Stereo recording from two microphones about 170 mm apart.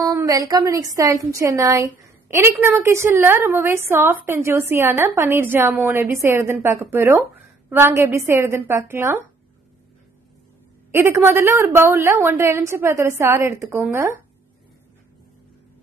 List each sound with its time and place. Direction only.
0.0 s a woman's voice: 20° right (ahead or behind)
10.9 s a woman's voice: 15° right (ahead or behind)